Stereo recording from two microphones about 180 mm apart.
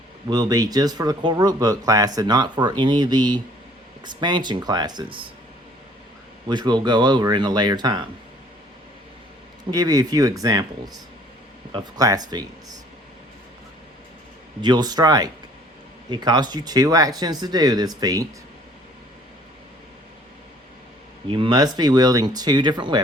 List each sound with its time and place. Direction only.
0.3 s speech: 20° right (ahead or behind)
6.5 s speech: 25° right (ahead or behind)
9.6 s speech: 20° right (ahead or behind)
14.6 s speech: 25° right (ahead or behind)
21.2 s speech: 30° right (ahead or behind)